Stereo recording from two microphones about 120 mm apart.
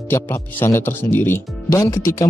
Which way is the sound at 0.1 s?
20° left (ahead or behind).